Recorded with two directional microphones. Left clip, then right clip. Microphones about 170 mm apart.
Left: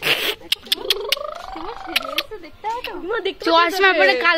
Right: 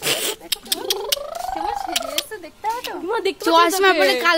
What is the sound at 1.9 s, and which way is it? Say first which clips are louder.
Speech: left 2 dB; 25° right (ahead or behind).